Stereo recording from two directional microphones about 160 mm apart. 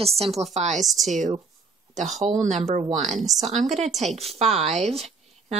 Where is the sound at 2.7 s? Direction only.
45° right (ahead or behind).